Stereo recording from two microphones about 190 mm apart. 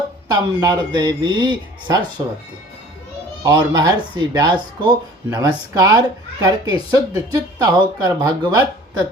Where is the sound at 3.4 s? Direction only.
20° right (ahead or behind).